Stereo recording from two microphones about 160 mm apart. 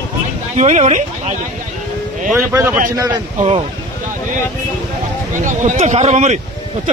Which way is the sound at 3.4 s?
40° right (ahead or behind).